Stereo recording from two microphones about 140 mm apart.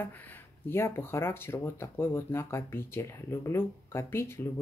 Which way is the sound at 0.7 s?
15° left (ahead or behind).